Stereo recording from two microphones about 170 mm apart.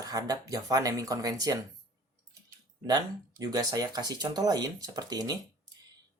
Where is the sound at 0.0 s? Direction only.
20° right (ahead or behind).